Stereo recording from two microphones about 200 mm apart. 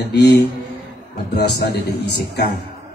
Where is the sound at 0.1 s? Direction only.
55° left (ahead or behind).